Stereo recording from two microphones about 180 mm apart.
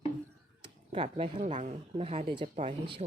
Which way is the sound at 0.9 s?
35° right (ahead or behind).